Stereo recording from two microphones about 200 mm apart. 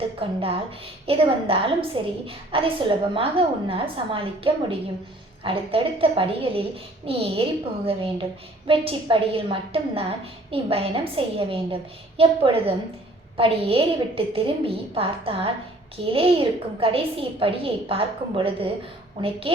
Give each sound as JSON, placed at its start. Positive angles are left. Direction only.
{"t": 0.2, "sound": "a woman's voice", "side_deg": -25}
{"t": 8.6, "sound": "a woman's voice", "side_deg": -25}